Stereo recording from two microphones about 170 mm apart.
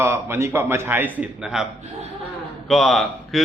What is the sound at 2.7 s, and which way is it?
Speech, centre (ahead or behind).